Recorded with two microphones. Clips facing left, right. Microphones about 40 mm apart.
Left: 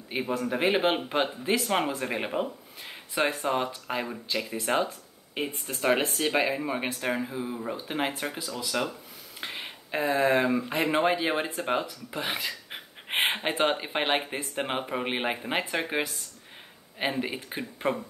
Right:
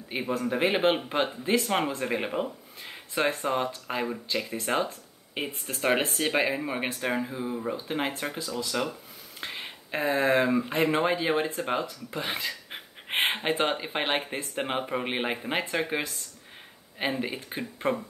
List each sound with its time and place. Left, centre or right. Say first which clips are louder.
0.1 s speech: even; centre
4.6 s speech: left 2 dB; centre
5.3 s speech: left 1 dB; centre
8.5 s speech: even; centre
9.4 s a sound: even; centre
10.0 s speech: even; centre